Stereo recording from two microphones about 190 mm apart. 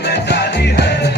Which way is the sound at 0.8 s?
60° left (ahead or behind).